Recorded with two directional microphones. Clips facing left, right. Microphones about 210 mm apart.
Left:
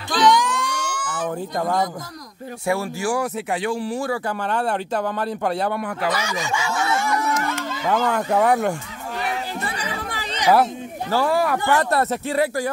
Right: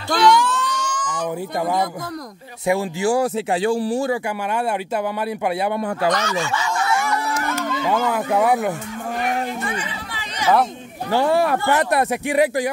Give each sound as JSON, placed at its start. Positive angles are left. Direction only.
{"t": 0.1, "sound": "a sound", "side_deg": 20}
{"t": 2.6, "sound": "speech", "side_deg": -20}
{"t": 4.5, "sound": "speech", "side_deg": -10}
{"t": 5.8, "sound": "speech", "side_deg": -30}
{"t": 6.0, "sound": "speech", "side_deg": 10}
{"t": 7.9, "sound": "speech", "side_deg": -5}
{"t": 9.6, "sound": "chatter", "side_deg": 35}
{"t": 11.1, "sound": "speech", "side_deg": -25}